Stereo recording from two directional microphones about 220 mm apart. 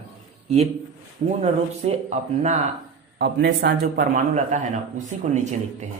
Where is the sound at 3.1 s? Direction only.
50° right (ahead or behind).